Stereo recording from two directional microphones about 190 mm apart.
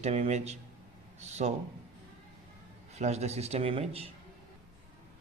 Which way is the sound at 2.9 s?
35° right (ahead or behind).